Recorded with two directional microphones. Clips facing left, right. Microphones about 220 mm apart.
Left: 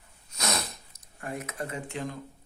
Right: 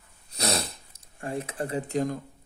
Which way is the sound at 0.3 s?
35° right (ahead or behind).